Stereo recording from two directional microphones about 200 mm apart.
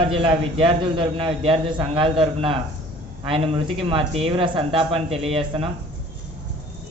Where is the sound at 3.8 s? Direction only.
30° right (ahead or behind).